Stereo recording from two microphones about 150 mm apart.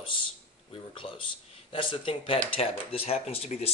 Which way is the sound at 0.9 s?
35° left (ahead or behind).